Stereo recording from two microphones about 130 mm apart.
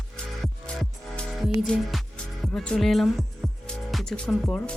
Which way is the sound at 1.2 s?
Centre (ahead or behind).